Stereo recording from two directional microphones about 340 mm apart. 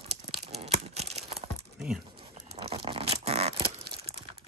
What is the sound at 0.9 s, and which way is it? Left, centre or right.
Tearing, centre.